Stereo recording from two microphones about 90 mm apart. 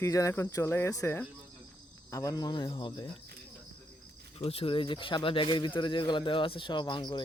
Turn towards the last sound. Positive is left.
turn(degrees=55)  # may be behind; listen again after turning